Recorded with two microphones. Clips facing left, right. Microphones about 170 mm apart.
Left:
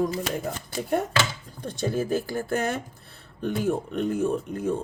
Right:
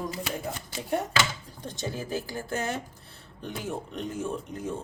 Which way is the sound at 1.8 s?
50° left (ahead or behind).